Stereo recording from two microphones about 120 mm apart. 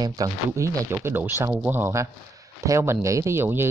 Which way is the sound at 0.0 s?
30° right (ahead or behind).